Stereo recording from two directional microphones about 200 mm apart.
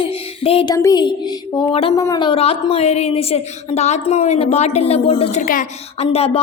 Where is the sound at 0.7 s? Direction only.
15° left (ahead or behind).